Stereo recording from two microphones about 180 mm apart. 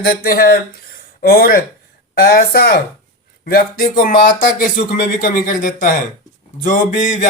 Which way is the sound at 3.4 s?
55° left (ahead or behind).